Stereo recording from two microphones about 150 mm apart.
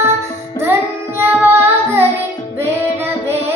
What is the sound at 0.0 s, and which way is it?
Music, 15° right (ahead or behind).